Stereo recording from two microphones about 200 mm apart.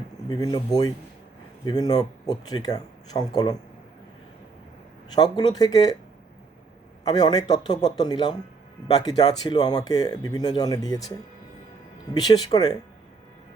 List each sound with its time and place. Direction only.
0.3 s speech: 20° left (ahead or behind)
5.1 s speech: 20° left (ahead or behind)
7.0 s speech: 20° left (ahead or behind)
12.1 s speech: 20° left (ahead or behind)